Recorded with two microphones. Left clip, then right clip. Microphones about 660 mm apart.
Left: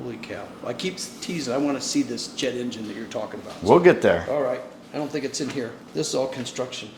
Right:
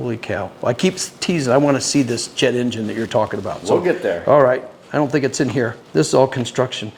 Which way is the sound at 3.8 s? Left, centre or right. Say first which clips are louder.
Left 2 dB; left.